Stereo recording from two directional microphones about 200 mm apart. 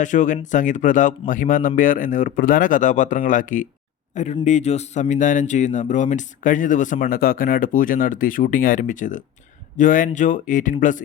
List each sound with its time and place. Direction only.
0.0 s speech: 40° left (ahead or behind)